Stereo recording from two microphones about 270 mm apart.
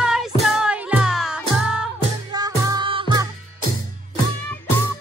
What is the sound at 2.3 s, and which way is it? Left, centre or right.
Music, centre.